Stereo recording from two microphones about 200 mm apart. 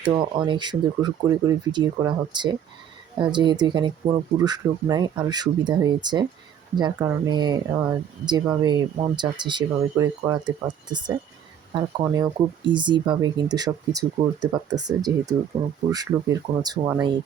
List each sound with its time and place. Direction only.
0.0 s speech: 20° right (ahead or behind)